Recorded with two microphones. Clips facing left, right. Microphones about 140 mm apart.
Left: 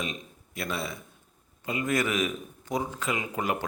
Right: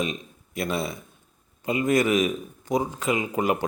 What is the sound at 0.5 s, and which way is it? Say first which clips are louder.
A man's voice: right 5 dB; 15° right (ahead or behind).